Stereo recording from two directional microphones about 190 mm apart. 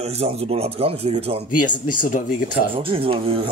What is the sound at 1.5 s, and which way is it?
Speech, 45° left (ahead or behind).